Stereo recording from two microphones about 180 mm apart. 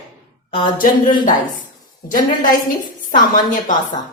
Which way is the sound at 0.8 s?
50° left (ahead or behind).